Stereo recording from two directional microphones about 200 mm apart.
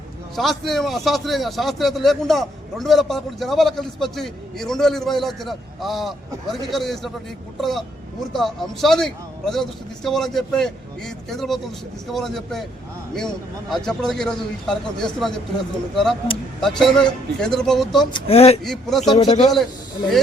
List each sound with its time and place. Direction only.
0.3 s a man's voice: centre (ahead or behind)
18.1 s speech: 30° left (ahead or behind)
18.6 s a man's voice: centre (ahead or behind)
19.1 s speech: 20° left (ahead or behind)